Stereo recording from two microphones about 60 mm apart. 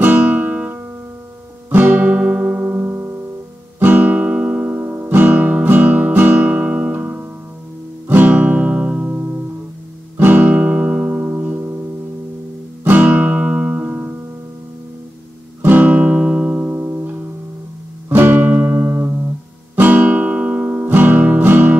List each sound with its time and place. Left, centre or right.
0.0 s music: right
3.8 s guitar: right
8.1 s music: right
10.1 s guitar: right
13.0 s guitar: right
15.6 s music: right
16.7 s music: right
18.1 s music: right
19.7 s guitar: right
20.9 s music: right